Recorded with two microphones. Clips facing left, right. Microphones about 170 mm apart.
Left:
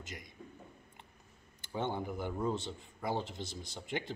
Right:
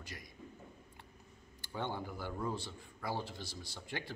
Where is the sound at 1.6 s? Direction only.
20° left (ahead or behind).